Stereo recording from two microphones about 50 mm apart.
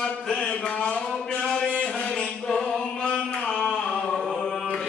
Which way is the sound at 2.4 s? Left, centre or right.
Centre.